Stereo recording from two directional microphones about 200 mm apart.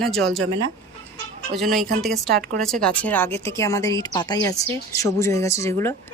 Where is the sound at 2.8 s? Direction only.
10° left (ahead or behind).